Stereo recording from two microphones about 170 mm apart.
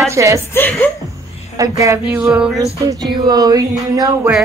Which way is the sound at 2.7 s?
20° right (ahead or behind).